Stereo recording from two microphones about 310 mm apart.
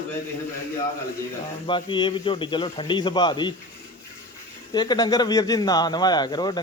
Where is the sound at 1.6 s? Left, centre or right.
Centre.